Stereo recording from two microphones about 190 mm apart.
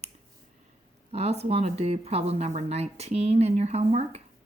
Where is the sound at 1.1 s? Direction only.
35° right (ahead or behind).